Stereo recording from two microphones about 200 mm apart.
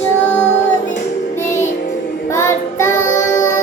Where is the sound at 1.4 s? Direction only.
35° left (ahead or behind).